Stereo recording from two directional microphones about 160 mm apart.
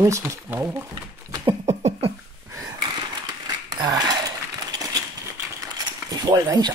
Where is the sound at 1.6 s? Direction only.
45° right (ahead or behind).